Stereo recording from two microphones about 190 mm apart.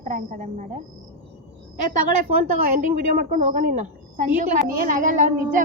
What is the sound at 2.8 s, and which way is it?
A woman's voice, 50° right (ahead or behind).